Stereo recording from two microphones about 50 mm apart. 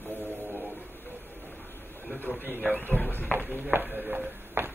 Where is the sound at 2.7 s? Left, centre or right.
Left.